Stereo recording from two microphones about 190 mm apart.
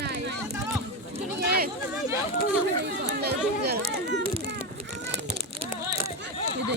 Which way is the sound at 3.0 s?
60° right (ahead or behind).